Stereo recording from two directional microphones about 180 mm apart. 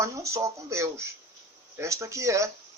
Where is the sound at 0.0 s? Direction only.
15° right (ahead or behind).